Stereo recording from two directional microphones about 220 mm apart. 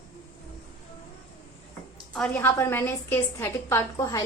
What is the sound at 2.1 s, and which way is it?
A woman's voice, 5° left (ahead or behind).